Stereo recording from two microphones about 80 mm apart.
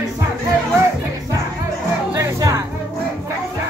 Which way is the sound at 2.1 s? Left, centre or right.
Right.